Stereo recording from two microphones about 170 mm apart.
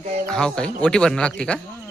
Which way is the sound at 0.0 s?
45° right (ahead or behind).